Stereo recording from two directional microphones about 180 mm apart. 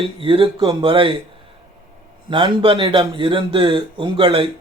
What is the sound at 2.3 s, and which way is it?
Speech, 30° right (ahead or behind).